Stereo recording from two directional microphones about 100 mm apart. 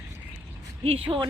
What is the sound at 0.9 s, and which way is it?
Speech, 65° right (ahead or behind).